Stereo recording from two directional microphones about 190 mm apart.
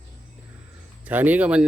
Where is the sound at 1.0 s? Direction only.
10° right (ahead or behind).